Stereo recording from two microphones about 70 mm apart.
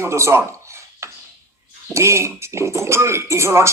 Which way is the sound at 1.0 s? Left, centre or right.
Right.